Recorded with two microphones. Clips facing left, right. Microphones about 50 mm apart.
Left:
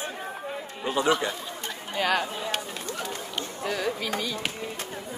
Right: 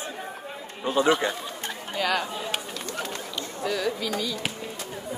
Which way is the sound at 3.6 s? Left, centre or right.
Left.